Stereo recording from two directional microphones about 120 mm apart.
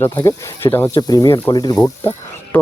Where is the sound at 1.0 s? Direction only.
30° left (ahead or behind).